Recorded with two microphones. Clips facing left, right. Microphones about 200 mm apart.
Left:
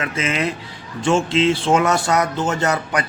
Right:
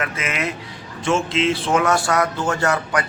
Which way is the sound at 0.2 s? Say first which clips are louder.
Left 4 dB; 30° left (ahead or behind).